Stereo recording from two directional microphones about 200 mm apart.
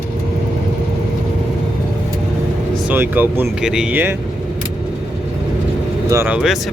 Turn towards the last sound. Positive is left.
turn(degrees=-5)  # may be behind; listen again after turning